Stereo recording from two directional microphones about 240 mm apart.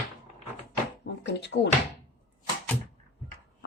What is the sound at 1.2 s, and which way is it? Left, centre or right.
Speech, left.